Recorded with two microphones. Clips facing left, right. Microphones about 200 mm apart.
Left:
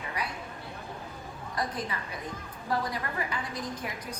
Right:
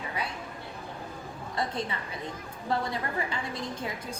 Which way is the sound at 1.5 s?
25° right (ahead or behind).